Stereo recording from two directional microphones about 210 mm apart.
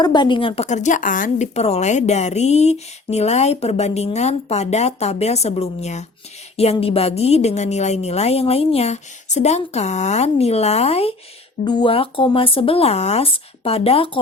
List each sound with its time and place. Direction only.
0.0 s a woman's voice: 20° left (ahead or behind)